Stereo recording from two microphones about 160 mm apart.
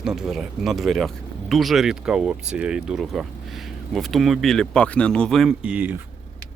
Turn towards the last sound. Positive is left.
turn(degrees=-10)  # may be behind; listen again after turning